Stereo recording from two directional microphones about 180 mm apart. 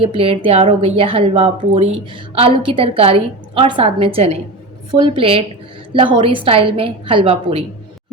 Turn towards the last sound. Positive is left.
turn(degrees=-30)  # may be behind; listen again after turning